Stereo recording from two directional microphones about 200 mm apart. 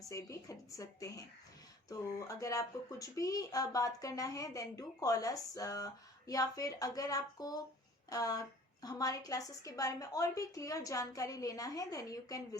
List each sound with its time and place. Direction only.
0.1 s speech: 15° left (ahead or behind)